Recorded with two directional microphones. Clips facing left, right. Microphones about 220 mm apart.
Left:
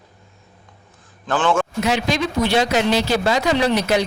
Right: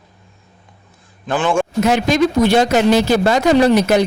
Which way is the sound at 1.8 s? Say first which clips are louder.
Right 10 dB; 50° right (ahead or behind).